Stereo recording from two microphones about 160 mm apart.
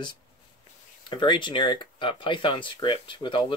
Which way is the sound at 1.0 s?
30° left (ahead or behind).